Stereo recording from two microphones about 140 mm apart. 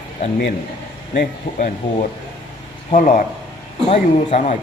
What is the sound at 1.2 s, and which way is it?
Speech, 75° left (ahead or behind).